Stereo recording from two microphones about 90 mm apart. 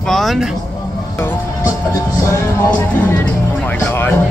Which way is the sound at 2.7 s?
20° left (ahead or behind).